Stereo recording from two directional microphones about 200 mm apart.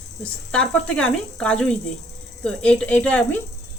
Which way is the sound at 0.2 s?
5° left (ahead or behind).